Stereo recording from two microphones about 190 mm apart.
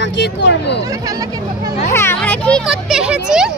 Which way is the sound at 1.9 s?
15° left (ahead or behind).